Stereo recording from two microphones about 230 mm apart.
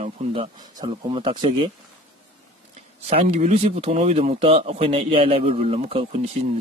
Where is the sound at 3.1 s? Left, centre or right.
Right.